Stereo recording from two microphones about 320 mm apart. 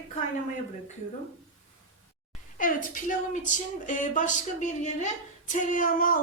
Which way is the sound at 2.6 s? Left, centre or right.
Left.